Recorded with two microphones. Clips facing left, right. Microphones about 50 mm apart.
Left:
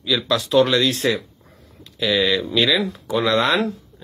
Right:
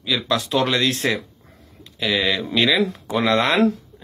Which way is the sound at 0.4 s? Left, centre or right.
Right.